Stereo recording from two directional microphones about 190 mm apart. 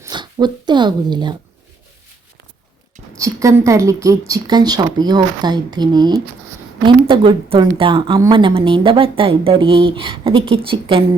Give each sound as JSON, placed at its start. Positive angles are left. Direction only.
{"t": 0.0, "sound": "speech", "side_deg": -20}
{"t": 3.2, "sound": "speech", "side_deg": -15}